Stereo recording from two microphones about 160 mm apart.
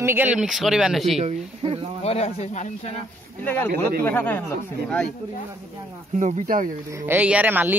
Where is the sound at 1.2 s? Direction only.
35° right (ahead or behind).